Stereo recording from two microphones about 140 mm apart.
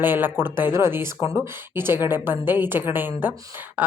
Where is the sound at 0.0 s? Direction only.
15° right (ahead or behind).